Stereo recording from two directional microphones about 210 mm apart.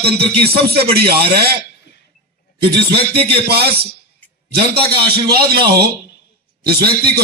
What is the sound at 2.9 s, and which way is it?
A man's voice, 50° right (ahead or behind).